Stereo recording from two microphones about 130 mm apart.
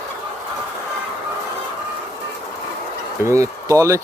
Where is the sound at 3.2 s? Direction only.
25° right (ahead or behind).